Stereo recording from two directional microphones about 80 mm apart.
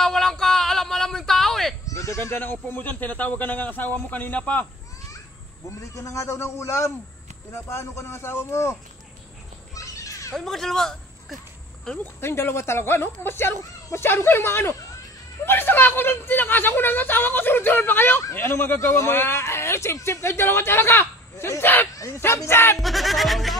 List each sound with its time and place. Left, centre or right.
0.0 s a sound: centre
2.0 s goat: left
2.3 s speech: left
5.7 s speech: left
9.8 s a sound: left
10.3 s speech: centre
12.2 s speech: left
21.9 s speech: left
22.8 s speech: centre